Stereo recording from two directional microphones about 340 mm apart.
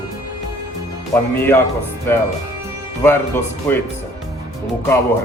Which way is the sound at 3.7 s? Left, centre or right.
Centre.